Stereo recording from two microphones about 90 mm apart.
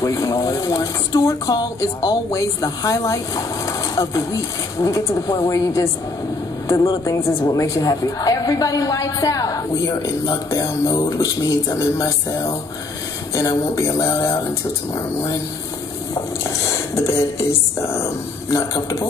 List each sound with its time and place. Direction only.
0.0 s speech: 40° left (ahead or behind)
6.7 s a woman's voice: 50° left (ahead or behind)
7.1 s a woman's voice: 35° left (ahead or behind)
16.4 s speech: 35° left (ahead or behind)